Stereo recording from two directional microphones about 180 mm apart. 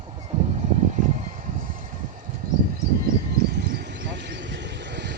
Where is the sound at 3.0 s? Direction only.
65° right (ahead or behind).